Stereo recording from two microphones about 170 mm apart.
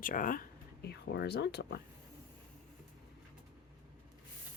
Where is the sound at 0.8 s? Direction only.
75° left (ahead or behind).